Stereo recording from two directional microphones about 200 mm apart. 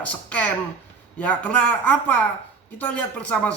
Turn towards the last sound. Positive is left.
turn(degrees=5)  # may be behind; listen again after turning